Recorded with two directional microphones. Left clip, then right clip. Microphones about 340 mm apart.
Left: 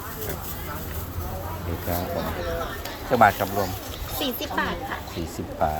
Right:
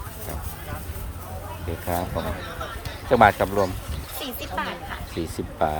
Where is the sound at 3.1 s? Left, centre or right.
Centre.